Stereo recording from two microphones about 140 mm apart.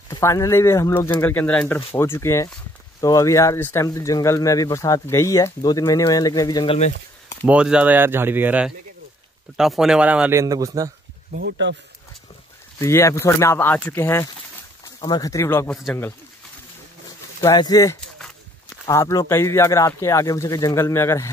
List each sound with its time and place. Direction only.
0.1 s speech: 20° left (ahead or behind)
6.7 s speech: 45° left (ahead or behind)
7.4 s speech: 10° right (ahead or behind)
10.3 s speech: 25° right (ahead or behind)
12.8 s speech: 20° left (ahead or behind)
15.0 s speech: 30° left (ahead or behind)
15.7 s speech: 5° left (ahead or behind)
17.4 s speech: 25° left (ahead or behind)